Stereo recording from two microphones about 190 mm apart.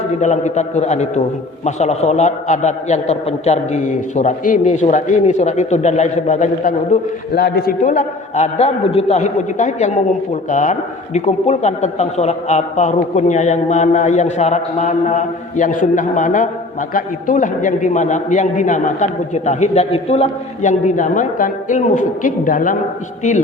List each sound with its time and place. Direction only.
0.2 s a man's voice: 40° left (ahead or behind)
7.3 s a man's voice: 55° left (ahead or behind)